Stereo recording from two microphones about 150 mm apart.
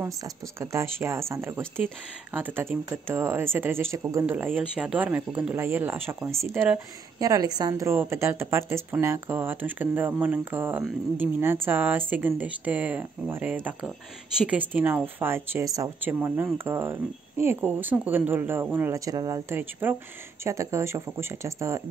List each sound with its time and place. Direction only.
0.0 s a woman's voice: 20° right (ahead or behind)